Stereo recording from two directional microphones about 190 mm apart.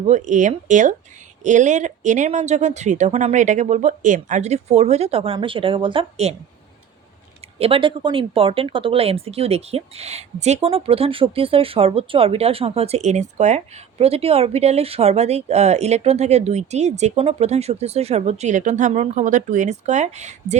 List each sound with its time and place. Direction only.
0.1 s speech: 40° right (ahead or behind)
7.6 s speech: 30° right (ahead or behind)